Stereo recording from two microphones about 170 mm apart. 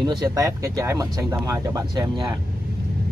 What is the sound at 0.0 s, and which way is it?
Speech, 25° right (ahead or behind).